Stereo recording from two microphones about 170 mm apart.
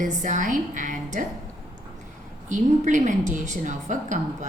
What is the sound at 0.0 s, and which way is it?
A woman's voice, 50° right (ahead or behind).